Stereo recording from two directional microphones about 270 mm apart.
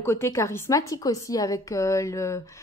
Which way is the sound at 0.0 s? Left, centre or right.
Centre.